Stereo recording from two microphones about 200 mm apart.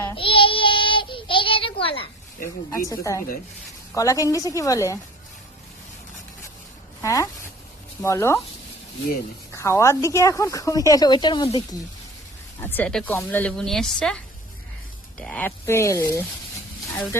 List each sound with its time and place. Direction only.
0.1 s child singing: 25° left (ahead or behind)
2.7 s a woman's voice: 15° left (ahead or behind)
7.0 s a woman's voice: 15° left (ahead or behind)
9.6 s a woman's voice: 15° left (ahead or behind)
12.6 s a woman's voice: 5° left (ahead or behind)
15.2 s a woman's voice: 5° left (ahead or behind)